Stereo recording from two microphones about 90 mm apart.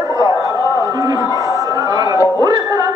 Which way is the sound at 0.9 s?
45° right (ahead or behind).